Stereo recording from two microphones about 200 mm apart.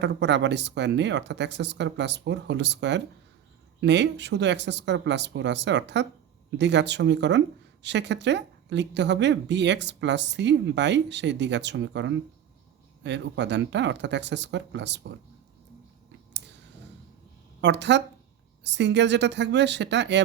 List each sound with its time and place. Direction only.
0.0 s speech: 60° right (ahead or behind)
17.6 s speech: 60° right (ahead or behind)